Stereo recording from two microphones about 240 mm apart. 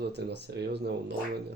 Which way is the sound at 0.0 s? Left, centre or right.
Right.